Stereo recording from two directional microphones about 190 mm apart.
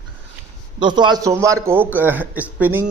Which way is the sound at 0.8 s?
25° right (ahead or behind).